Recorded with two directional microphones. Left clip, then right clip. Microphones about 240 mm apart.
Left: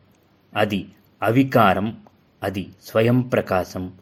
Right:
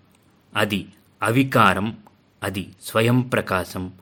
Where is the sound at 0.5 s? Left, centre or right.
Centre.